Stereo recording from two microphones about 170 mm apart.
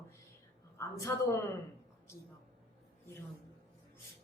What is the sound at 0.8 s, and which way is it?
Speech, 15° left (ahead or behind).